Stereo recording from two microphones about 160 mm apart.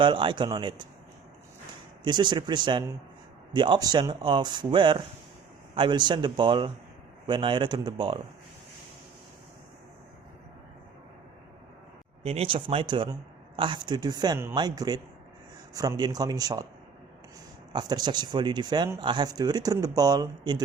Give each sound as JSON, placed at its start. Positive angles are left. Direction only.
{"t": 0.0, "sound": "speech", "side_deg": -30}
{"t": 2.0, "sound": "speech", "side_deg": -30}
{"t": 12.2, "sound": "speech", "side_deg": -40}
{"t": 17.7, "sound": "speech", "side_deg": -25}